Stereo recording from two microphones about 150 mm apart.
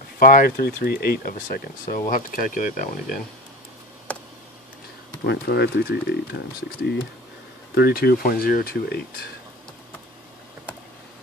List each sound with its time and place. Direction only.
0.2 s speech: 75° left (ahead or behind)
5.2 s speech: 90° left